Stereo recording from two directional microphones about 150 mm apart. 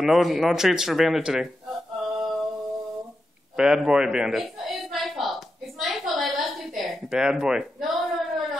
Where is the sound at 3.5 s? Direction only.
5° right (ahead or behind).